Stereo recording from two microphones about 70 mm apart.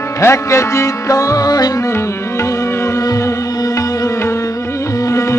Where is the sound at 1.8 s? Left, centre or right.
Left.